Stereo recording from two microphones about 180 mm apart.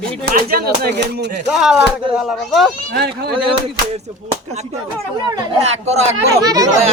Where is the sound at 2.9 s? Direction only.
60° right (ahead or behind).